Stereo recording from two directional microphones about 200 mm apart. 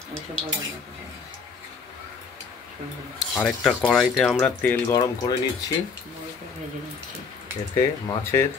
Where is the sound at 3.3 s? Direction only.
5° left (ahead or behind).